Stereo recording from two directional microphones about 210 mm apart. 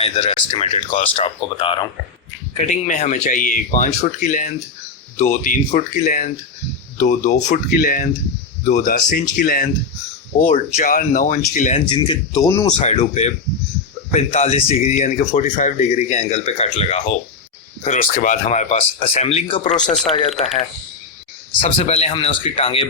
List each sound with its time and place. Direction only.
0.0 s speech: 30° left (ahead or behind)
2.6 s speech: 35° left (ahead or behind)
11.9 s speech: 20° left (ahead or behind)
12.8 s speech: 30° left (ahead or behind)
21.6 s speech: 30° left (ahead or behind)